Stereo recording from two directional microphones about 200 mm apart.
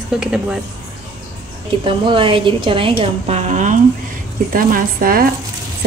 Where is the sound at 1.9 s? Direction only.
25° right (ahead or behind).